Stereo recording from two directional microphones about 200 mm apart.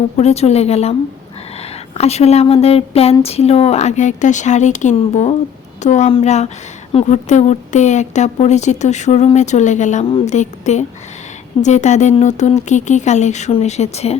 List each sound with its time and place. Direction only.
0.2 s a woman's voice: 35° left (ahead or behind)
2.0 s a woman's voice: 30° left (ahead or behind)